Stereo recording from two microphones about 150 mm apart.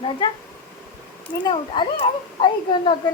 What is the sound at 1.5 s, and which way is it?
A child's voice, 35° left (ahead or behind).